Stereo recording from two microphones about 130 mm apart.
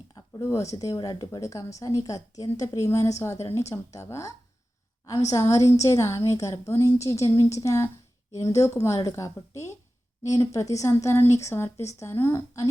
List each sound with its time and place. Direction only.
0.1 s speech: 25° left (ahead or behind)